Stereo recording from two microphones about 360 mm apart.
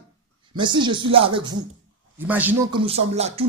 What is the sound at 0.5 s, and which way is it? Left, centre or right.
Speech, centre.